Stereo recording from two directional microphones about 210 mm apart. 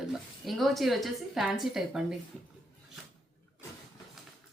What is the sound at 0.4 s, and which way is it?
Speech, centre (ahead or behind).